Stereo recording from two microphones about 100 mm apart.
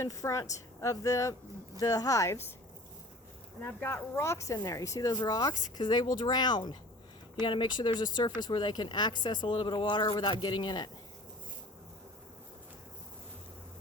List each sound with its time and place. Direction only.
0.0 s speech: 30° left (ahead or behind)
3.6 s speech: 20° left (ahead or behind); by 10.9 s 45° left (ahead or behind)